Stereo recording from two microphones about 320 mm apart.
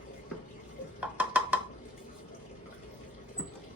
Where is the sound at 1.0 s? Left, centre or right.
Centre.